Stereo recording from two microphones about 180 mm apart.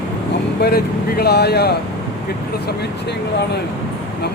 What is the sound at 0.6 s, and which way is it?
Speech, 60° left (ahead or behind).